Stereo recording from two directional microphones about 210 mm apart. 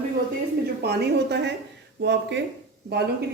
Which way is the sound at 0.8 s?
50° right (ahead or behind).